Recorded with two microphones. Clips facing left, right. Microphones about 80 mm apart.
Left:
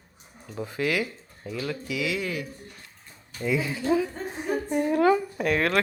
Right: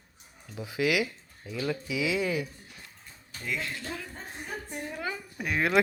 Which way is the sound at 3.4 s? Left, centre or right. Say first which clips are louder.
Left 8 dB; centre.